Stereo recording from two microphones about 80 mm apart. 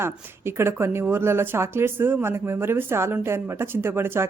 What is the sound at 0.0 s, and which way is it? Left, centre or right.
A woman's voice, right.